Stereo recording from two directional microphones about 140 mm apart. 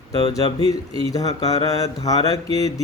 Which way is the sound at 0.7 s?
25° left (ahead or behind).